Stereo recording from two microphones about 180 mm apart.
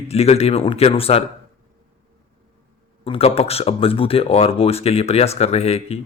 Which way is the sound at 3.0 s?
30° left (ahead or behind).